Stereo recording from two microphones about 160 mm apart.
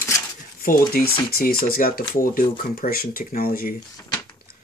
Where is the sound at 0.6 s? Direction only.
70° left (ahead or behind).